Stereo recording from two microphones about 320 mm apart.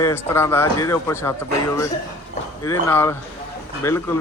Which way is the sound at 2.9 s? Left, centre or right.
Centre.